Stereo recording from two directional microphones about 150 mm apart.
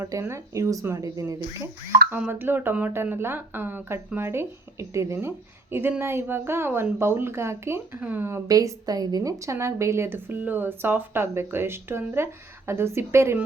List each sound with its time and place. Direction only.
0.0 s a woman's voice: 20° right (ahead or behind)
8.4 s a woman's voice: 25° right (ahead or behind)